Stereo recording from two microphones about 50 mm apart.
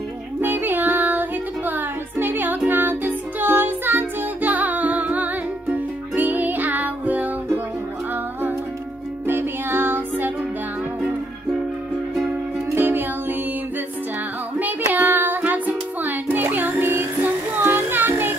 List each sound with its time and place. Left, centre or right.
0.4 s music: right
9.3 s music: right
12.7 s music: right
14.9 s music: right